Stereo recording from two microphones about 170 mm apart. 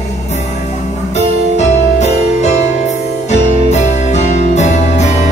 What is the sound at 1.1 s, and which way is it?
Music, 40° left (ahead or behind).